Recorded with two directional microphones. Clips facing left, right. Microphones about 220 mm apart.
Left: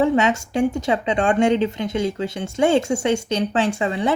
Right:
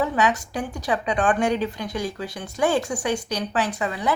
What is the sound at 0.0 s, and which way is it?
A woman's voice, 25° left (ahead or behind).